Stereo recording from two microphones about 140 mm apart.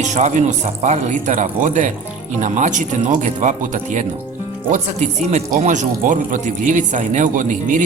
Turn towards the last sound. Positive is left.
turn(degrees=-65)  # may be behind; listen again after turning